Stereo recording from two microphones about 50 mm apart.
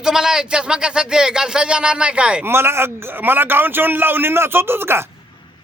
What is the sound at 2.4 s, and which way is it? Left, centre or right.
Speech, right.